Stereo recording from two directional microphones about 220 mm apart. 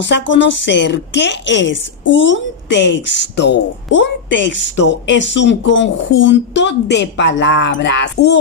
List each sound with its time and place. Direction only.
0.0 s a woman's voice: 55° left (ahead or behind)